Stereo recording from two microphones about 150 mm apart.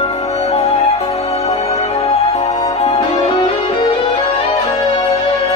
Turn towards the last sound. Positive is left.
turn(degrees=40)  # may be behind; listen again after turning